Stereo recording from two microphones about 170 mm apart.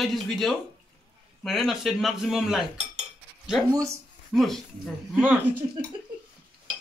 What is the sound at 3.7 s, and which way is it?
Speech, 20° right (ahead or behind).